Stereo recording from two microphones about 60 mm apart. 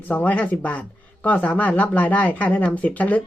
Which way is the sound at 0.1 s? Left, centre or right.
Left.